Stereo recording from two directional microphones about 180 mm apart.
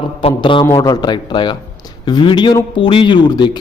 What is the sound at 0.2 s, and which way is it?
Speech, 30° left (ahead or behind).